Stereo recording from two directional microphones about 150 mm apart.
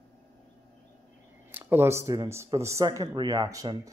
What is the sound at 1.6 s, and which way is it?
Speech, 15° right (ahead or behind).